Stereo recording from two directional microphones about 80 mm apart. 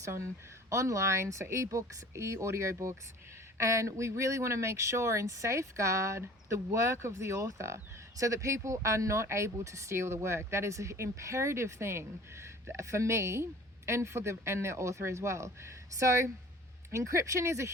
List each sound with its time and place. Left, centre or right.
0.0 s speech: right